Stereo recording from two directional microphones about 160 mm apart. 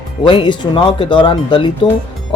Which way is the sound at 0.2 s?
30° left (ahead or behind).